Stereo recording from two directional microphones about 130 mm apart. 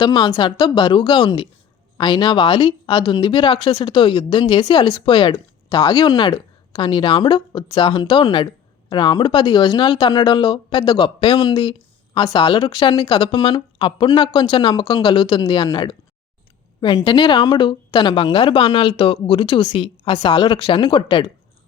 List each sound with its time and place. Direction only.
0.0 s speech: 35° left (ahead or behind)